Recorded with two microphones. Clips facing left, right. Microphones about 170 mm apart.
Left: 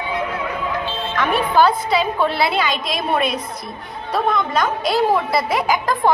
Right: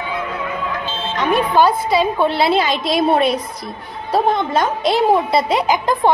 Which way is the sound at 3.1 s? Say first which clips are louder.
Right 5 dB; 30° right (ahead or behind).